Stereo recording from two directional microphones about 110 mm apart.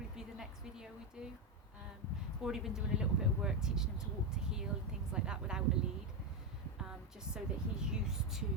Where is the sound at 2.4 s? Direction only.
5° right (ahead or behind).